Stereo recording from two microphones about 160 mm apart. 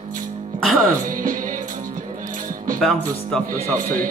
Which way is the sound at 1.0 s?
55° right (ahead or behind).